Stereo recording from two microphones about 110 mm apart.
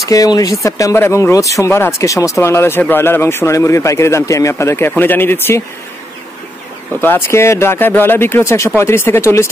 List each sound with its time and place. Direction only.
0.0 s speech: 30° left (ahead or behind)
7.0 s speech: 20° left (ahead or behind)